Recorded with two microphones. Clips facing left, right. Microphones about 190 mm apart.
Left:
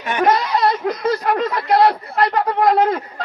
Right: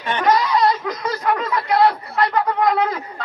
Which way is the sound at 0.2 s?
45° left (ahead or behind).